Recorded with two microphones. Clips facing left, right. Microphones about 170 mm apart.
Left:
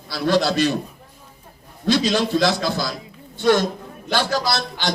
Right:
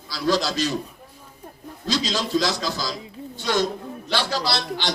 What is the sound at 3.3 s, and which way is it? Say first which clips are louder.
A man's voice: left 6 dB; 55° left (ahead or behind).